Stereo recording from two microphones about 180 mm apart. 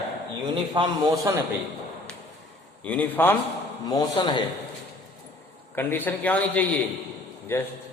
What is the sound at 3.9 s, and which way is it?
Speech, 20° left (ahead or behind).